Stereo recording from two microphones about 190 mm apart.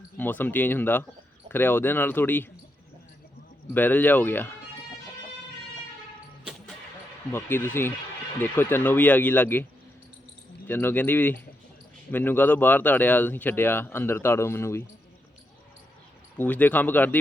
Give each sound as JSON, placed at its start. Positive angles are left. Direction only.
{"t": 0.2, "sound": "speech", "side_deg": 10}
{"t": 3.8, "sound": "speech", "side_deg": 10}
{"t": 6.4, "sound": "music", "side_deg": -5}
{"t": 7.3, "sound": "speech", "side_deg": 10}
{"t": 10.7, "sound": "speech", "side_deg": 10}
{"t": 16.4, "sound": "speech", "side_deg": 10}